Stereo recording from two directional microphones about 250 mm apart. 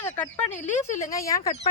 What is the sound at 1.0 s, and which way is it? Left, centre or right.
Speech, centre.